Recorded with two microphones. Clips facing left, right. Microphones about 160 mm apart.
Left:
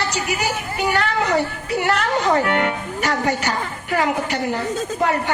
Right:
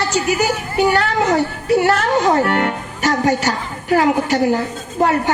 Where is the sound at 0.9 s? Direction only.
40° right (ahead or behind).